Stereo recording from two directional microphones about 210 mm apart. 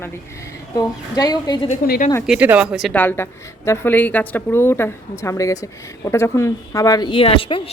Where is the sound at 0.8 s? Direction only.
15° left (ahead or behind).